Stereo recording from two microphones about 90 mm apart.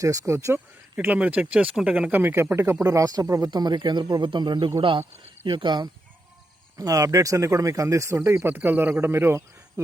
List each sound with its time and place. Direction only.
0.0 s speech: 40° right (ahead or behind)
0.9 s speech: 15° right (ahead or behind)
2.8 s speech: 40° right (ahead or behind)
3.5 s speech: 50° right (ahead or behind)
4.8 s a man's voice: 70° right (ahead or behind)
5.5 s speech: 60° right (ahead or behind)
6.7 s speech: 40° right (ahead or behind)